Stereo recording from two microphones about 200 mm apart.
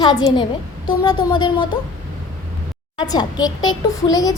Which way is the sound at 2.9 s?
20° left (ahead or behind).